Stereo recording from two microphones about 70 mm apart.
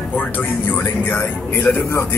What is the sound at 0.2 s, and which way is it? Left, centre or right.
A man's voice, left.